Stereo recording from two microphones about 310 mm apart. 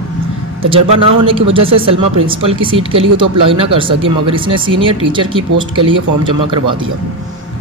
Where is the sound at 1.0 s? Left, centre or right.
Centre.